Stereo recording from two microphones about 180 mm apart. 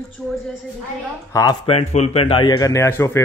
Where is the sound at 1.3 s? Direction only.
20° left (ahead or behind).